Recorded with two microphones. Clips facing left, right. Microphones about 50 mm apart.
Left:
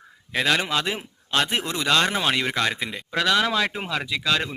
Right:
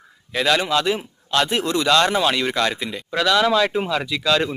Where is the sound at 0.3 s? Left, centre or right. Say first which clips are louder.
Right 3 dB; left.